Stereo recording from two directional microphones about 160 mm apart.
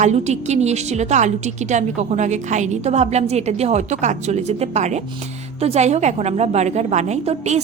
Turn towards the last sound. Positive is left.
turn(degrees=-40)  # may be behind; listen again after turning